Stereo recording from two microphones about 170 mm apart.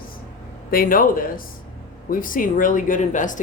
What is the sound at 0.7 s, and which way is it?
A woman's voice, 55° left (ahead or behind).